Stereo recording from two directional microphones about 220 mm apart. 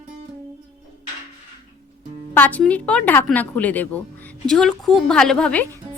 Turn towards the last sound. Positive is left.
turn(degrees=5)  # may be behind; listen again after turning